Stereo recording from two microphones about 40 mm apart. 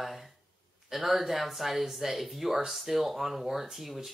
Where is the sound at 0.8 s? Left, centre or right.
Centre.